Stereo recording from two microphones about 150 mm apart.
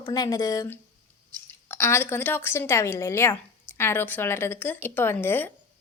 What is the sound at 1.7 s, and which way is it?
A woman's voice, 15° left (ahead or behind).